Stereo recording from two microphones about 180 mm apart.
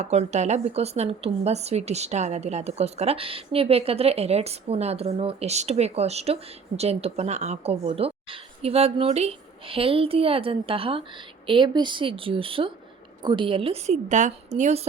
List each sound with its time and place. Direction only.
0.0 s a woman's voice: 40° right (ahead or behind)